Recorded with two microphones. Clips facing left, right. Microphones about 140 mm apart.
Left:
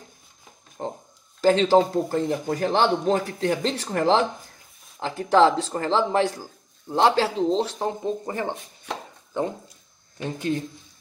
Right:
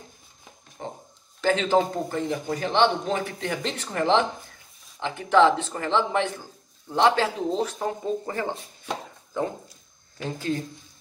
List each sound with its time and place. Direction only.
0.8 s a sound: 40° left (ahead or behind)
1.4 s speech: 35° left (ahead or behind)
10.1 s speech: 20° left (ahead or behind)